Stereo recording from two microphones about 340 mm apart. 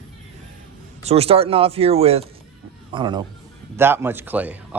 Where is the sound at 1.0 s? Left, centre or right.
Centre.